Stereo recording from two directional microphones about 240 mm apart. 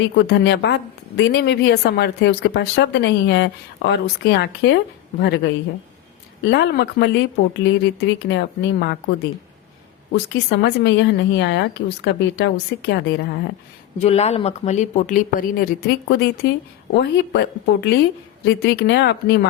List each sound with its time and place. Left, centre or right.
0.0 s a woman's voice: left
14.0 s a woman's voice: left